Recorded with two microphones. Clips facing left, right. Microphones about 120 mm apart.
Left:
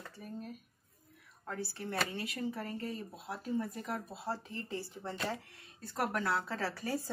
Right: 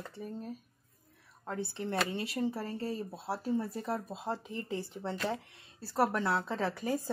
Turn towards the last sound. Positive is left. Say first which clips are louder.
# right 4 dB
turn(degrees=-15)  # may be behind; listen again after turning